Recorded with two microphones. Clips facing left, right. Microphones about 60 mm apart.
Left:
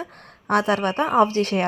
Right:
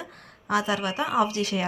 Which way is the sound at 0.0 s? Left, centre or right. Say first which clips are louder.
Left 6 dB; left.